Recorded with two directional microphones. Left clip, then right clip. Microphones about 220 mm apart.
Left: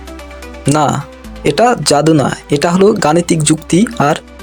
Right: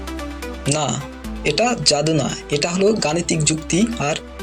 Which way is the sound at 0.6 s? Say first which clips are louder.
Left 10 dB; 50° left (ahead or behind).